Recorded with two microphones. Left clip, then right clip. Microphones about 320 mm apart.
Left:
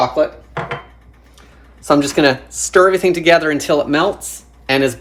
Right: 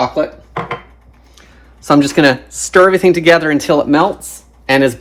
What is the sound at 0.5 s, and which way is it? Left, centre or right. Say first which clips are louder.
Dishes: right 3 dB; right.